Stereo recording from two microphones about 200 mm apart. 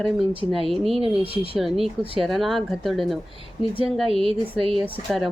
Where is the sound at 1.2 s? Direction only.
30° right (ahead or behind).